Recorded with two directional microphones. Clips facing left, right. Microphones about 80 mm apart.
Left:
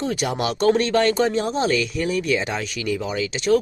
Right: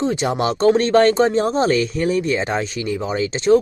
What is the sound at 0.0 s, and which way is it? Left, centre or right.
Speech, right.